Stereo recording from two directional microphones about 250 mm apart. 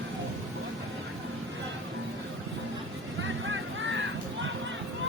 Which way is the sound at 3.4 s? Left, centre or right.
Right.